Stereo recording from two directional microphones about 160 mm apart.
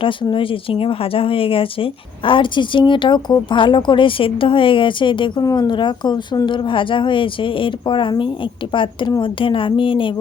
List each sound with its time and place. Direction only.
0.0 s speech: 30° left (ahead or behind)